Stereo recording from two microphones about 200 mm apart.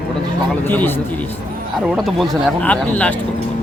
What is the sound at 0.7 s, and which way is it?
Speech, 10° left (ahead or behind).